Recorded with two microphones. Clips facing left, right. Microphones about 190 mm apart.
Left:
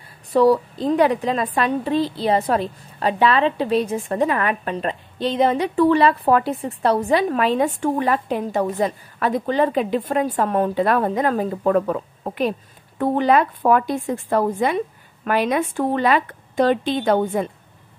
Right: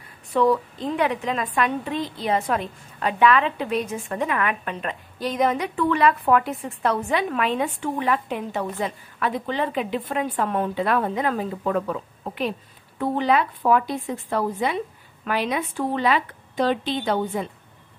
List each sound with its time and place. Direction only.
0.3 s a woman's voice: 35° left (ahead or behind)